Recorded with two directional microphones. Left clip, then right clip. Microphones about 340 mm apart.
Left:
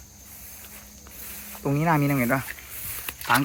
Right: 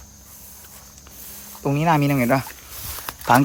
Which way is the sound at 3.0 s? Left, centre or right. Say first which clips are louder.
Right 6 dB; centre.